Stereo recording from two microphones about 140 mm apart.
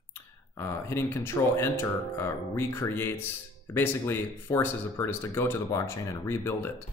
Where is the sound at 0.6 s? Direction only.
20° left (ahead or behind).